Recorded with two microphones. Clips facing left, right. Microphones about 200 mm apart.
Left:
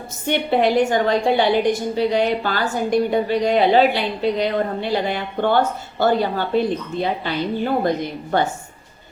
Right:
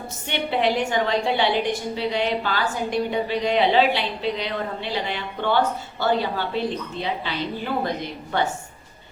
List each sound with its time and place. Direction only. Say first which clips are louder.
0.3 s a woman's voice: left 5 dB; 45° left (ahead or behind)